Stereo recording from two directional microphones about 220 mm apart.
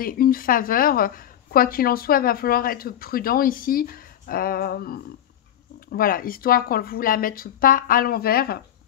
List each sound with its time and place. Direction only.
0.0 s a woman's voice: 40° left (ahead or behind)